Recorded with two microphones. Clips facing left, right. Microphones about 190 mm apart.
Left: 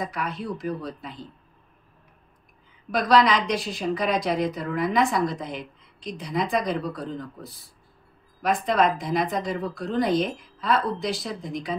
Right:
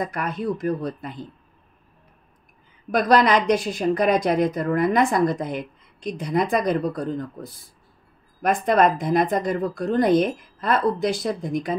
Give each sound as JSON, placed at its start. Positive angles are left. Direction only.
{"t": 0.1, "sound": "a woman's voice", "side_deg": -50}
{"t": 2.9, "sound": "a woman's voice", "side_deg": -50}